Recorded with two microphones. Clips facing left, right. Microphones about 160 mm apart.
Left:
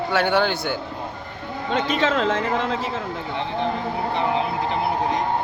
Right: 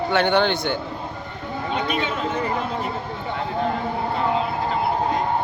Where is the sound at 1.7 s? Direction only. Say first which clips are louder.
Left 5 dB; 90° left.